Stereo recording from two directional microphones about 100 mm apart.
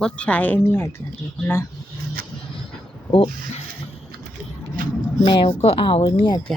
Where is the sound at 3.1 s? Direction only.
60° left (ahead or behind).